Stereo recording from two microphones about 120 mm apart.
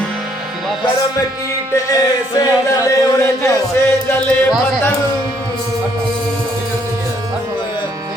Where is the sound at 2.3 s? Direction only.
30° left (ahead or behind).